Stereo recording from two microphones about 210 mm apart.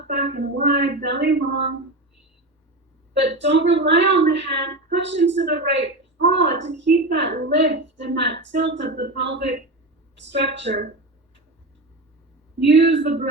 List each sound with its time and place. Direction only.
0.3 s a woman's voice: 50° right (ahead or behind)
3.2 s a woman's voice: 55° right (ahead or behind)
12.5 s a woman's voice: 55° right (ahead or behind)